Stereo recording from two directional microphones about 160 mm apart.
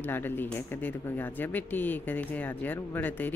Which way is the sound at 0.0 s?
15° left (ahead or behind).